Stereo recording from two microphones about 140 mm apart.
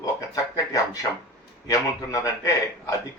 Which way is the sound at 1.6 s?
25° left (ahead or behind).